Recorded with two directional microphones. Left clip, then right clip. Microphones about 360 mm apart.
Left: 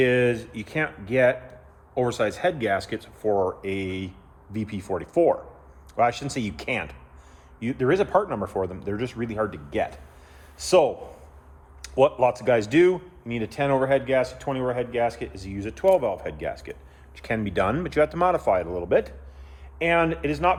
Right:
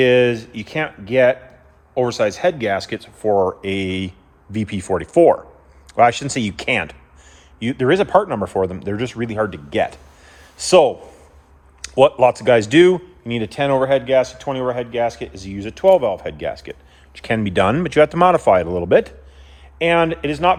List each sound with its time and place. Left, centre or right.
0.0 s speech: right